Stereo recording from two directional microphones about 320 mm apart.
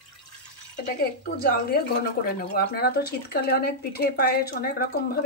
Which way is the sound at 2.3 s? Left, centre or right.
Left.